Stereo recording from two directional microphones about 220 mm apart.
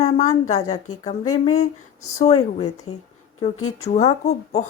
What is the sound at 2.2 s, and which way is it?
Speech, 30° left (ahead or behind).